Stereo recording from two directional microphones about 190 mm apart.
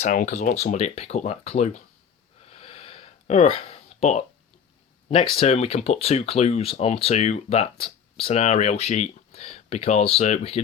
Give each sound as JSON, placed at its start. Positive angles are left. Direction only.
{"t": 0.0, "sound": "speech", "side_deg": 40}
{"t": 2.5, "sound": "a sound", "side_deg": 30}
{"t": 5.0, "sound": "speech", "side_deg": 25}